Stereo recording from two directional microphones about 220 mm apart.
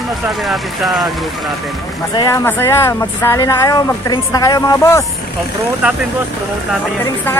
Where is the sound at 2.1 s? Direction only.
15° left (ahead or behind).